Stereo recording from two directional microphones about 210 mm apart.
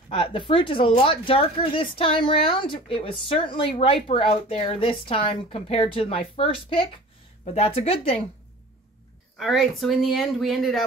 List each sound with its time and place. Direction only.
0.1 s speech: 25° left (ahead or behind)
9.4 s speech: centre (ahead or behind)